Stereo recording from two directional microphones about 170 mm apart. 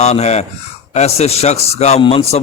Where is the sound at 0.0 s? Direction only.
40° left (ahead or behind).